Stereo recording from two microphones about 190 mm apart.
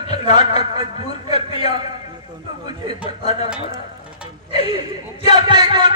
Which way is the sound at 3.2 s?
35° left (ahead or behind).